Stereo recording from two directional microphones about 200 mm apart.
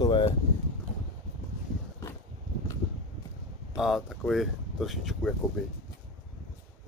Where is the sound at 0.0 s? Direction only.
20° left (ahead or behind).